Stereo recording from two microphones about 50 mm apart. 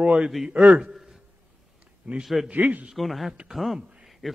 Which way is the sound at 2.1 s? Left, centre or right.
Right.